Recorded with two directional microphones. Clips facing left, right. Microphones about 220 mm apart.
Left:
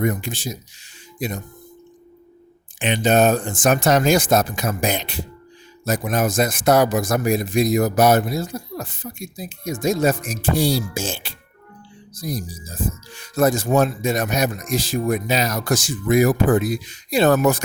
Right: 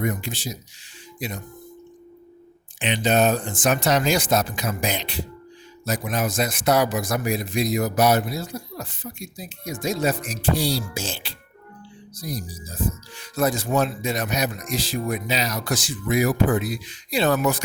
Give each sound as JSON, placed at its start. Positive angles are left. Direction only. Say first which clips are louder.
{"t": 0.0, "sound": "a man's voice", "louder": "left 4 dB", "side_deg": 50}
{"t": 2.7, "sound": "a man's voice", "louder": "left 3 dB", "side_deg": 45}